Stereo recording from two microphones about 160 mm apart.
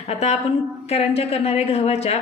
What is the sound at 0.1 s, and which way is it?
Speech, 45° left (ahead or behind).